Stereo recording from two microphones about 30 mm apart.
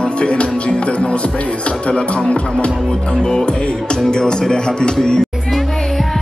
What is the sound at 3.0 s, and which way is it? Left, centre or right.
A man's voice, left.